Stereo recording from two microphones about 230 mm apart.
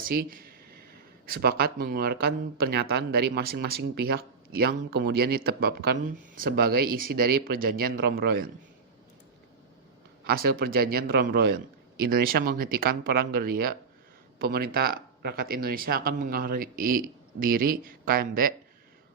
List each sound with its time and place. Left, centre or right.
0.0 s speech: right
10.2 s speech: right